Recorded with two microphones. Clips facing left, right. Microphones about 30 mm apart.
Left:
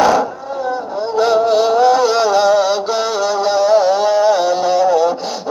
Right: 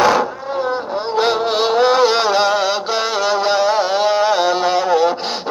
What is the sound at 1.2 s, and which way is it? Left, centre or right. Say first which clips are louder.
Music: left 5 dB; right.